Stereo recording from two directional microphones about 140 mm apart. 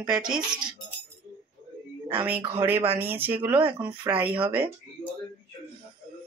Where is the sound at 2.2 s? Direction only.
15° right (ahead or behind).